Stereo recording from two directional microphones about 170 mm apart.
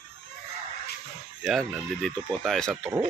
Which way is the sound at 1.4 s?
Centre (ahead or behind).